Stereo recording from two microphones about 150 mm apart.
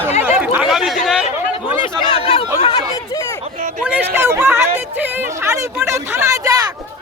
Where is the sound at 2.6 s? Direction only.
40° left (ahead or behind).